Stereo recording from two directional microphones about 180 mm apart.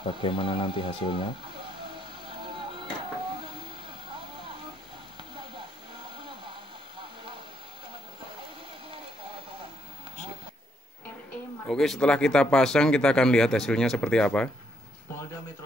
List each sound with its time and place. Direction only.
0.0 s speech: 30° left (ahead or behind)
2.0 s vehicle: 30° right (ahead or behind)
11.6 s speech: 5° left (ahead or behind)